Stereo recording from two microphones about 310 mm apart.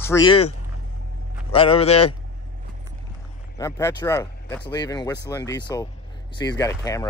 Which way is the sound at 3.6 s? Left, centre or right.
Centre.